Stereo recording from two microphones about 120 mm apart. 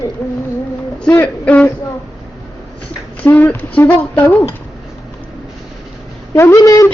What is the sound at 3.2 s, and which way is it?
Speech, 15° left (ahead or behind).